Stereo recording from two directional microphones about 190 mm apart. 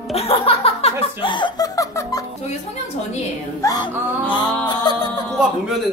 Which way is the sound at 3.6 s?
20° left (ahead or behind).